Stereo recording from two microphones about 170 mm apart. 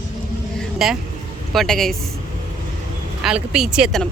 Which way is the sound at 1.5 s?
Centre (ahead or behind).